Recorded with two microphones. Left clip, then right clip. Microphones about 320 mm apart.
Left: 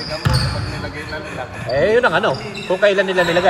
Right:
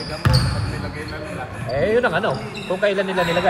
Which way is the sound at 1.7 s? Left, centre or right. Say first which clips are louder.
Left 4 dB; left.